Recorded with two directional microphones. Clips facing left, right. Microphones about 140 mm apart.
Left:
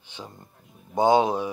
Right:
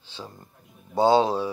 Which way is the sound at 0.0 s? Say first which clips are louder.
Right 1 dB; 15° left (ahead or behind).